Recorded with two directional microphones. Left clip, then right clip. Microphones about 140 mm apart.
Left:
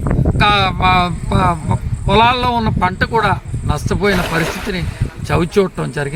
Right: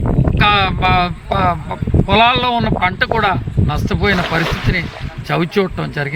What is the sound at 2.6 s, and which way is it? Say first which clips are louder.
Speech: right 1 dB; 40° right (ahead or behind).